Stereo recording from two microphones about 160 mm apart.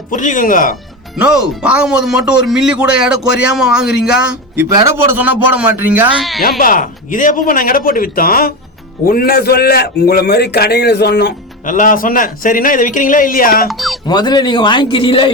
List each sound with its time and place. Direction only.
0.1 s a man's voice: 50° left (ahead or behind)
1.1 s a man's voice: 5° right (ahead or behind)
6.1 s speech: centre (ahead or behind)
6.6 s a man's voice: 55° left (ahead or behind); by 11.3 s 90° left
11.6 s a man's voice: 55° left (ahead or behind)
13.7 s speech: centre (ahead or behind)
14.1 s a man's voice: 25° left (ahead or behind)